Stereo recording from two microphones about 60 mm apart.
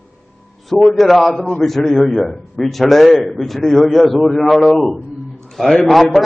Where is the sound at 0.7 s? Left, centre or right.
Centre.